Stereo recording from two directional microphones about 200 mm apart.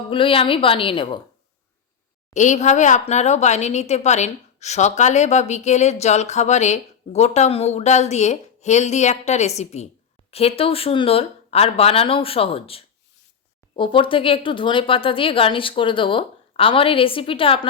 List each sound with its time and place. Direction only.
0.1 s speech: 25° left (ahead or behind)
2.3 s a woman's voice: 35° left (ahead or behind)